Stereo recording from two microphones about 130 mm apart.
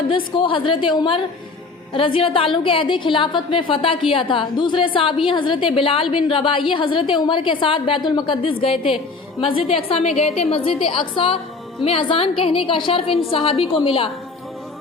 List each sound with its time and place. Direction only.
0.3 s a woman's voice: 40° left (ahead or behind)